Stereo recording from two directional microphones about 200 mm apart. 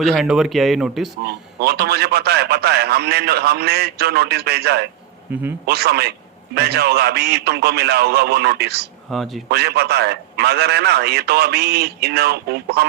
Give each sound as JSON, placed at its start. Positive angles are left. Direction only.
{"t": 0.0, "sound": "speech", "side_deg": 0}
{"t": 1.3, "sound": "a man's voice", "side_deg": -50}
{"t": 9.0, "sound": "speech", "side_deg": 0}
{"t": 9.5, "sound": "a man's voice", "side_deg": -55}